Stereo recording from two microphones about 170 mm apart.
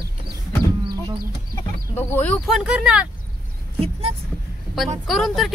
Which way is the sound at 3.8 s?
35° right (ahead or behind).